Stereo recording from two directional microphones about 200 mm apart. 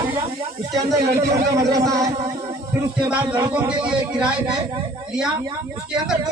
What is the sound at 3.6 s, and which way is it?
Speech, 5° right (ahead or behind).